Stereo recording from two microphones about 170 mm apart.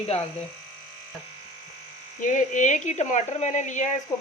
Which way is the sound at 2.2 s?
50° left (ahead or behind).